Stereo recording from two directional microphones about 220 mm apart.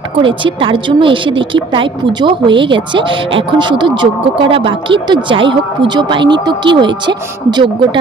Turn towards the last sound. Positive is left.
turn(degrees=-20)  # may be behind; listen again after turning